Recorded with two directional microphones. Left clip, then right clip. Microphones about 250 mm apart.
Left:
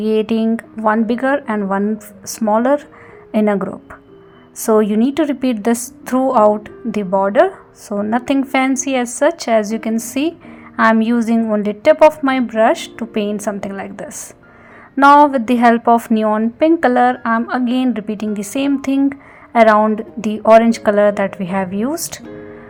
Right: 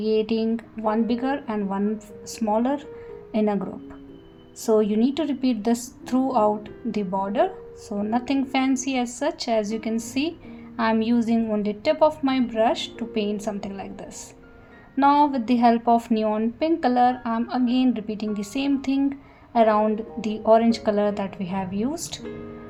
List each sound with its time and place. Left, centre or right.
0.0 s a woman's voice: left